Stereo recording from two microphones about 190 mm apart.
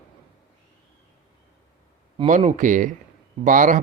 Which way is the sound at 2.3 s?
40° right (ahead or behind).